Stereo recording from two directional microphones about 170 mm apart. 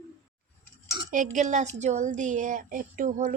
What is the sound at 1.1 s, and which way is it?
A woman's voice, 50° right (ahead or behind).